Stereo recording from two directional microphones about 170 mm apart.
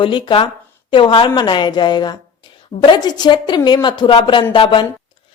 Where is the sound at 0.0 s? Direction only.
30° left (ahead or behind).